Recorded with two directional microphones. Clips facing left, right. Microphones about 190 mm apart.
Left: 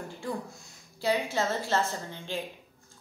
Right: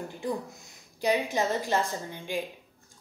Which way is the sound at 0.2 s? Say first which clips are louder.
Right 3 dB; 20° right (ahead or behind).